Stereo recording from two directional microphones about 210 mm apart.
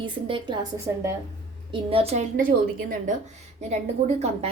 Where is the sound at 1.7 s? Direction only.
25° right (ahead or behind).